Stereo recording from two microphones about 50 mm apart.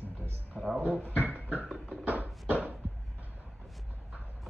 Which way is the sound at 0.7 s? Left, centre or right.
Right.